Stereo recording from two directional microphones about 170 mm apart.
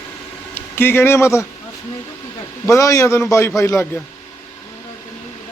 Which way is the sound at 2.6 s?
20° left (ahead or behind).